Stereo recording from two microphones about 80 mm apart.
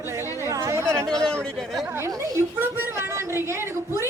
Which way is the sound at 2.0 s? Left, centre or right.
Right.